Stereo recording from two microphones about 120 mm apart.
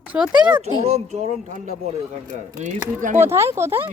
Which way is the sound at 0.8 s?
65° right (ahead or behind).